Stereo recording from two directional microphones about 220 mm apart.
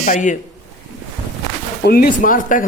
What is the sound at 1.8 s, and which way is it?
Speech, 45° left (ahead or behind).